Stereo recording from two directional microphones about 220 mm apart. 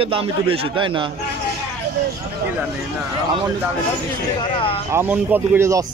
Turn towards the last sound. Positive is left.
turn(degrees=-15)  # may be behind; listen again after turning